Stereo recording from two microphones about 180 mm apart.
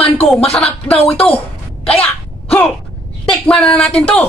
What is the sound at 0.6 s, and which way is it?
Speech, 35° left (ahead or behind).